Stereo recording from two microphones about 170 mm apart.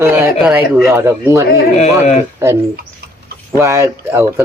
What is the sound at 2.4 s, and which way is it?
Speech, 15° right (ahead or behind).